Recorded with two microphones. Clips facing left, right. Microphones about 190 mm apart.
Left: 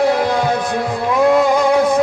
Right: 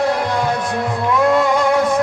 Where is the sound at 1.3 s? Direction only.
Centre (ahead or behind).